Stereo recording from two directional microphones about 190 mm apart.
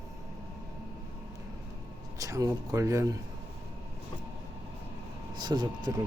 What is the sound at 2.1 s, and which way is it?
Speech, 20° right (ahead or behind).